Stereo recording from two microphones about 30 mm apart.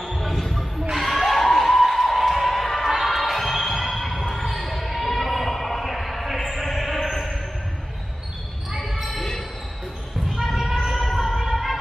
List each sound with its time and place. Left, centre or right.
0.2 s a sound: centre
3.0 s music: centre
4.5 s basketball bounce: centre
6.5 s music: centre
10.4 s a sound: centre
11.1 s music: centre